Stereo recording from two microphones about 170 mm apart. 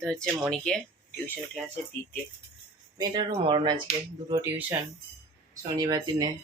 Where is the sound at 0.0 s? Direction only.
5° left (ahead or behind).